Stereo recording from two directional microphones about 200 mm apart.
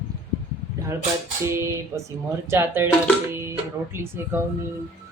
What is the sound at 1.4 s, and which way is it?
Speech, 15° right (ahead or behind).